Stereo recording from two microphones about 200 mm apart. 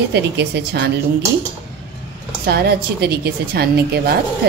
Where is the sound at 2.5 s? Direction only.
55° right (ahead or behind).